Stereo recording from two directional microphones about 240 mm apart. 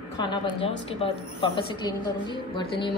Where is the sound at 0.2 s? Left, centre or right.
Left.